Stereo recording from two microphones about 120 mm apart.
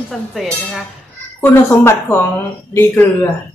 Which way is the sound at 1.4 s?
20° left (ahead or behind).